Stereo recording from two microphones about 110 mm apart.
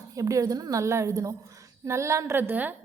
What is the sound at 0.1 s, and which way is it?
A woman's voice, 30° right (ahead or behind).